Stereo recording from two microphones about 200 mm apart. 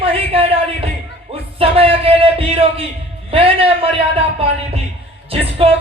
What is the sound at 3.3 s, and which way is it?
Speech, 25° right (ahead or behind).